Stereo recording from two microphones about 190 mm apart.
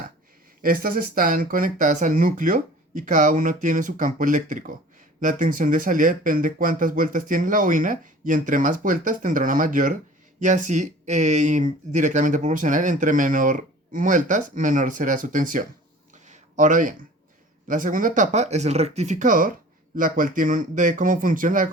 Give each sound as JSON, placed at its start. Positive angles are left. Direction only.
{"t": 0.6, "sound": "speech", "side_deg": -50}
{"t": 16.1, "sound": "a sound", "side_deg": -40}
{"t": 17.7, "sound": "speech", "side_deg": -45}